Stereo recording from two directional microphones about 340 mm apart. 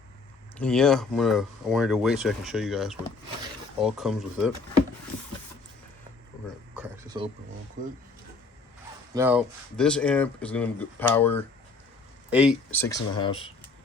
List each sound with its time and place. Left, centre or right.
0.6 s speech: centre
6.7 s speech: centre
7.8 s speech: right
9.1 s speech: centre